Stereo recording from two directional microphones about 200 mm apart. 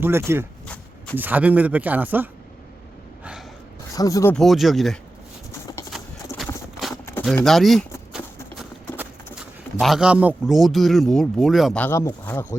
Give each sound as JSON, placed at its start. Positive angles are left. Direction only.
{"t": 0.0, "sound": "a man's voice", "side_deg": -10}
{"t": 3.9, "sound": "speech", "side_deg": 15}
{"t": 4.4, "sound": "speech", "side_deg": 0}
{"t": 6.9, "sound": "a sound", "side_deg": 10}
{"t": 7.3, "sound": "speech", "side_deg": 0}
{"t": 9.0, "sound": "speech", "side_deg": -5}